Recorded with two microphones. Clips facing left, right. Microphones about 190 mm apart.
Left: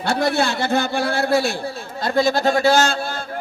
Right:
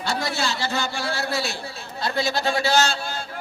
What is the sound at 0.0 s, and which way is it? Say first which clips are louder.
A man's voice: left 7 dB; 60° left (ahead or behind).